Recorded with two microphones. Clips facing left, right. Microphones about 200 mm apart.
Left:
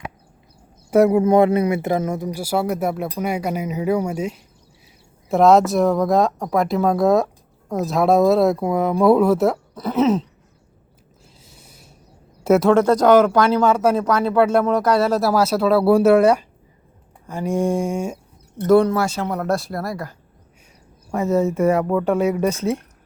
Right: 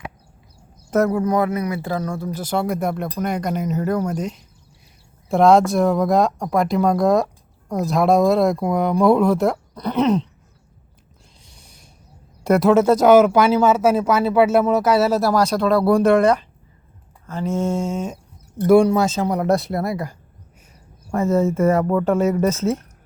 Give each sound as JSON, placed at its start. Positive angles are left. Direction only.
{"t": 0.9, "sound": "speech", "side_deg": 15}
{"t": 11.4, "sound": "a sound", "side_deg": 5}
{"t": 12.4, "sound": "speech", "side_deg": 0}
{"t": 18.6, "sound": "speech", "side_deg": -15}
{"t": 21.8, "sound": "speech", "side_deg": 0}
{"t": 22.2, "sound": "speech", "side_deg": 15}